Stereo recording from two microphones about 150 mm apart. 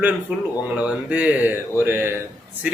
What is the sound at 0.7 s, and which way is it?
A man's voice, 10° right (ahead or behind).